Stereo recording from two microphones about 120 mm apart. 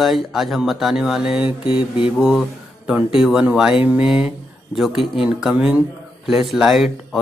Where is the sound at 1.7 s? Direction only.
45° left (ahead or behind).